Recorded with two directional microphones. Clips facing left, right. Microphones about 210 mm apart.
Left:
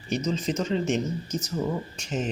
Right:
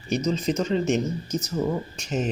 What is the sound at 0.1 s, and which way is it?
Speech, 40° right (ahead or behind).